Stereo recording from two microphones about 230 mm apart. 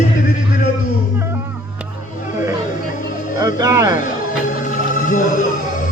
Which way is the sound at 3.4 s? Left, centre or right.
Centre.